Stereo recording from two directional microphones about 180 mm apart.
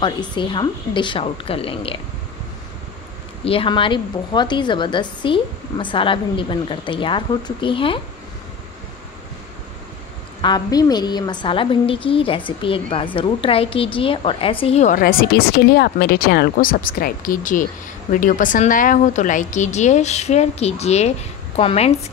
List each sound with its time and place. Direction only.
0.0 s a woman's voice: 25° left (ahead or behind)
3.4 s a woman's voice: 30° left (ahead or behind)
10.4 s a woman's voice: 20° left (ahead or behind)